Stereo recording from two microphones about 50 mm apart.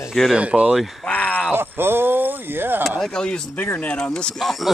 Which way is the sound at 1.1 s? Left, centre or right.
Left.